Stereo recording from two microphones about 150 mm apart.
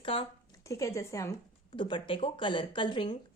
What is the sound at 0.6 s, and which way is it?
Speech, 20° left (ahead or behind).